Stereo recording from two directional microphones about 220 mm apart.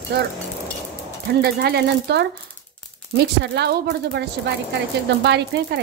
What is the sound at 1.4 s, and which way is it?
Speech, 45° right (ahead or behind).